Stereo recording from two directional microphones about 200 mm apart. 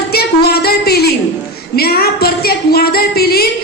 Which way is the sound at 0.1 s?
50° left (ahead or behind).